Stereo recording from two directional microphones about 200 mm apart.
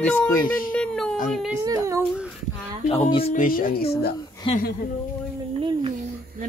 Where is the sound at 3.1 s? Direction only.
30° left (ahead or behind); by 3.9 s 50° left (ahead or behind).